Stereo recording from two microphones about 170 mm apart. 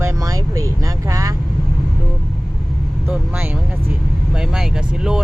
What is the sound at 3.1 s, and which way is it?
Vehicle, 10° right (ahead or behind).